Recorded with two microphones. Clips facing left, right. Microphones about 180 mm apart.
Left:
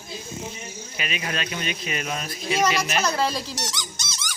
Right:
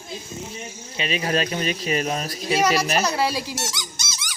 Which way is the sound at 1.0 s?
35° right (ahead or behind).